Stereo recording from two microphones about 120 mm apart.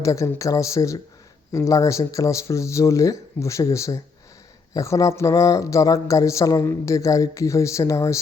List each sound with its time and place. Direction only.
0.0 s speech: 25° left (ahead or behind)